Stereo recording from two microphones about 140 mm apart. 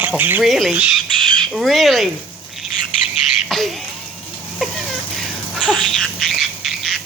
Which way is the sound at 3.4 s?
Centre (ahead or behind).